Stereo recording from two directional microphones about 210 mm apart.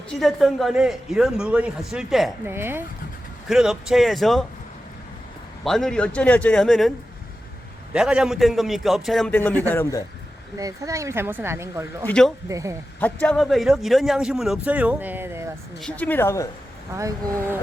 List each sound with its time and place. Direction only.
0.1 s a man's voice: centre (ahead or behind)
5.6 s a man's voice: centre (ahead or behind)
7.9 s a man's voice: 5° right (ahead or behind)
10.6 s speech: 15° right (ahead or behind)
12.0 s a man's voice: 5° left (ahead or behind)
12.5 s speech: 15° right (ahead or behind)
13.0 s a man's voice: 5° left (ahead or behind); by 15.4 s 10° right (ahead or behind)
15.8 s a woman's voice: 5° left (ahead or behind)
16.9 s speech: 15° right (ahead or behind)